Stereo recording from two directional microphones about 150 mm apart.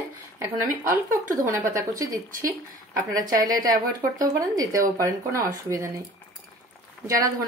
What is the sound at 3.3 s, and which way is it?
Speech, 65° right (ahead or behind).